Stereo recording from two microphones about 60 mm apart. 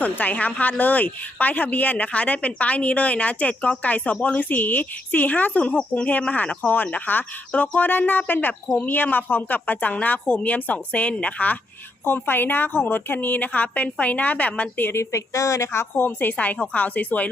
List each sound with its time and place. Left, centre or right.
0.0 s a woman's voice: left
12.0 s a woman's voice: left
14.8 s a woman's voice: left